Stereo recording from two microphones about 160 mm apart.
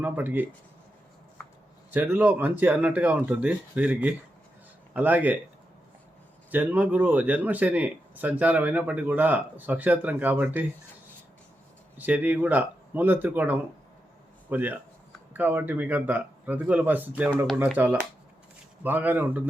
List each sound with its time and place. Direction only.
0.0 s speech: 10° right (ahead or behind)
1.9 s speech: 10° right (ahead or behind)
6.5 s speech: 10° right (ahead or behind)
11.9 s speech: 10° right (ahead or behind)
18.8 s speech: 10° right (ahead or behind)